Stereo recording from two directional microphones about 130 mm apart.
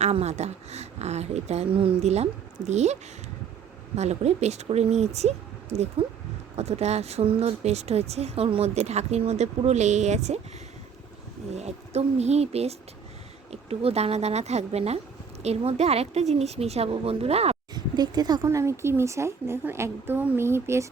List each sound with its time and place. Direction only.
0.0 s a woman's voice: 55° right (ahead or behind)
11.5 s a woman's voice: 55° right (ahead or behind)
17.7 s speech: 35° right (ahead or behind)